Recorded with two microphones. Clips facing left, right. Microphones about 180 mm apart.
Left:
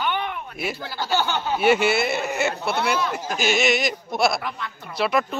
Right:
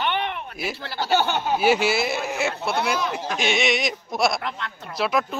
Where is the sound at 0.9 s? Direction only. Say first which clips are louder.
Right 3 dB; 20° right (ahead or behind).